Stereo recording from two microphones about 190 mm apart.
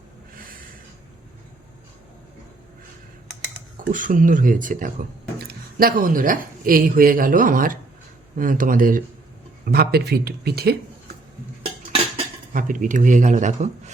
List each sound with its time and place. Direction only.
3.8 s speech: 45° right (ahead or behind)
11.6 s cutlery: 30° right (ahead or behind)
12.5 s speech: 45° right (ahead or behind)